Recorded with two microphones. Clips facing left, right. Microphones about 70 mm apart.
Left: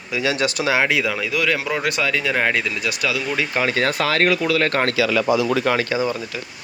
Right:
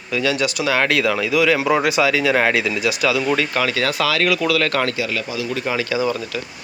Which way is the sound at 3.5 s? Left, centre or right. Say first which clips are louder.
Even; left.